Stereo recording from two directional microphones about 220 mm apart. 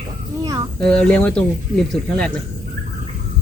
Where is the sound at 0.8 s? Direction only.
5° left (ahead or behind).